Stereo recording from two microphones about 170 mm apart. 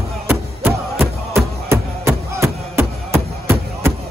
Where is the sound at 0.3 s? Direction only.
10° right (ahead or behind).